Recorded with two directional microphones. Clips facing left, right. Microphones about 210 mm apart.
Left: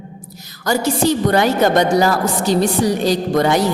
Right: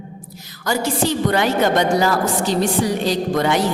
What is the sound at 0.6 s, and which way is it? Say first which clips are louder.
A man's voice: left 4 dB; 40° left (ahead or behind).